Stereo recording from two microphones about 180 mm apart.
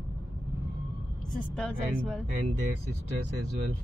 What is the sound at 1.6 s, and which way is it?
Speech, 5° left (ahead or behind).